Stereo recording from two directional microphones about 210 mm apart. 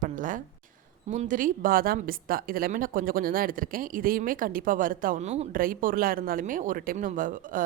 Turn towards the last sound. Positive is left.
turn(degrees=-40)  # may be behind; listen again after turning